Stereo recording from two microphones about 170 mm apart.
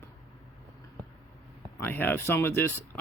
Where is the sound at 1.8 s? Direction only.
15° left (ahead or behind).